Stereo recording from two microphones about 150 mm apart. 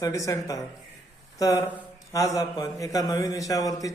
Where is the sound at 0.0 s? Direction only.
20° left (ahead or behind).